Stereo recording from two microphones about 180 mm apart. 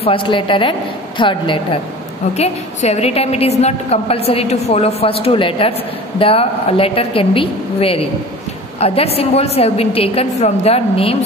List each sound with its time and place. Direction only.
0.0 s a woman's voice: 30° left (ahead or behind)